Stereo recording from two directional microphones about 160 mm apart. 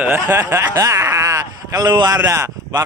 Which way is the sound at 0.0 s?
15° right (ahead or behind).